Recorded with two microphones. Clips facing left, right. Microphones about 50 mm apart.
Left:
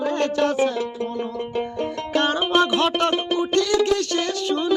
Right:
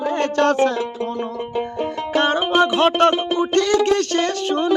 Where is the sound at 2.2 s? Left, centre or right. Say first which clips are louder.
Right 3 dB; right.